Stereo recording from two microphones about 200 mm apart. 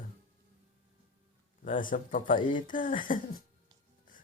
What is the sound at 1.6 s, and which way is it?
Speech, 40° left (ahead or behind).